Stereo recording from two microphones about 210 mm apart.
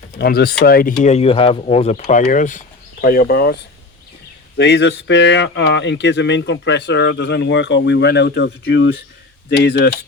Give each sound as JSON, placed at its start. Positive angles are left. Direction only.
{"t": 0.2, "sound": "speech", "side_deg": 50}